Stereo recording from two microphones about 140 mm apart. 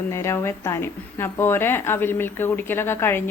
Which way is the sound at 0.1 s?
20° left (ahead or behind).